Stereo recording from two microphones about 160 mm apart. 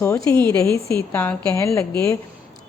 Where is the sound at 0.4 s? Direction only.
20° left (ahead or behind).